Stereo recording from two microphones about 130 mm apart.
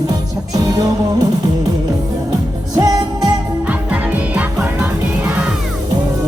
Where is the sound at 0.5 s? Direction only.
30° right (ahead or behind).